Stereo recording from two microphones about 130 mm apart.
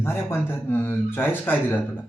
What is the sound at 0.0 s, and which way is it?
Speech, 20° left (ahead or behind).